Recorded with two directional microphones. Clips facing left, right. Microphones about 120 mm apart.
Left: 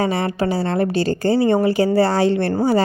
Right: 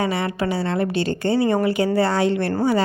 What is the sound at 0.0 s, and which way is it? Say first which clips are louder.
A woman's voice: left 3 dB; 35° left (ahead or behind).